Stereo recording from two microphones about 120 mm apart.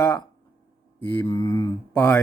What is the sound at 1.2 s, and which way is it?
Mantra, 25° left (ahead or behind).